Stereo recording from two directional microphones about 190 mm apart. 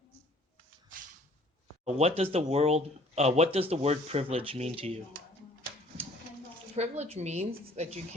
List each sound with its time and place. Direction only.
1.8 s speech: 35° right (ahead or behind)
6.7 s speech: 35° right (ahead or behind)